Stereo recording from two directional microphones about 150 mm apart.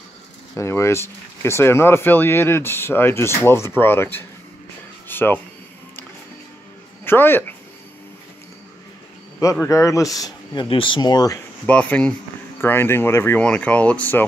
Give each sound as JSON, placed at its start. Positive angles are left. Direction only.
{"t": 0.6, "sound": "speech", "side_deg": 20}
{"t": 5.0, "sound": "a sound", "side_deg": 15}
{"t": 7.1, "sound": "speech", "side_deg": 15}
{"t": 9.4, "sound": "a man's voice", "side_deg": 20}
{"t": 11.6, "sound": "speech", "side_deg": 10}